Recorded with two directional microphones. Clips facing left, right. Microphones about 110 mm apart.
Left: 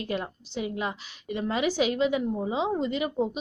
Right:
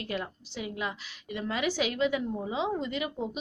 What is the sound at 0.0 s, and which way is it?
Speech, 25° left (ahead or behind).